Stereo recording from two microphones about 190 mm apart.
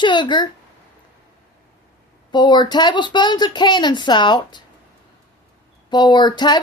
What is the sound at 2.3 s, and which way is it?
Speech, 25° left (ahead or behind).